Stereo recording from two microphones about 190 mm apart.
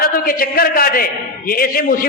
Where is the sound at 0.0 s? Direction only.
50° left (ahead or behind).